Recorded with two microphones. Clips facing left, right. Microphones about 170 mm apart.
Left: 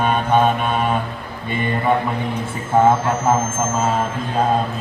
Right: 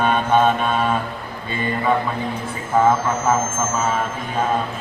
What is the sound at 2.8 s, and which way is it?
Speech, 30° left (ahead or behind).